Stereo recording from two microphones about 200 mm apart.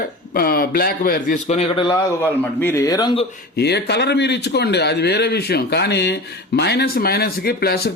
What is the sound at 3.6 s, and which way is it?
Speech, 55° left (ahead or behind).